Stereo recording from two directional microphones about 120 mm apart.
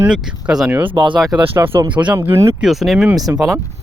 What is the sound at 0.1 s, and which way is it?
Speech, 5° right (ahead or behind).